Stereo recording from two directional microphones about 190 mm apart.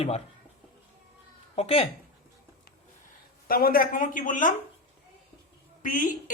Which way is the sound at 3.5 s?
50° left (ahead or behind).